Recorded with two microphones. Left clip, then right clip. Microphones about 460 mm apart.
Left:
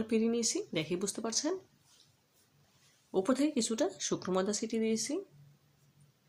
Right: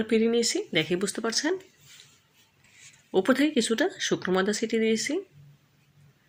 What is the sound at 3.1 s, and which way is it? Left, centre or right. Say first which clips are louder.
A woman's voice: right 8 dB; right.